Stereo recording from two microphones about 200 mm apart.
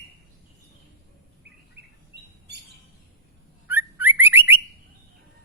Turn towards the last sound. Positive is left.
turn(degrees=-10)  # may be behind; listen again after turning